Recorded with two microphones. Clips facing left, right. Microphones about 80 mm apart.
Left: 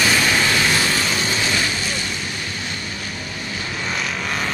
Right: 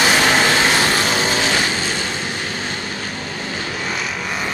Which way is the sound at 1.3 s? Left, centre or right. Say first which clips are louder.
Right 3 dB; right.